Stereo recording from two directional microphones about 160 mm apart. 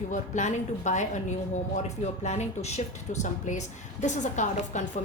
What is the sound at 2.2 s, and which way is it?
A woman's voice, 45° left (ahead or behind).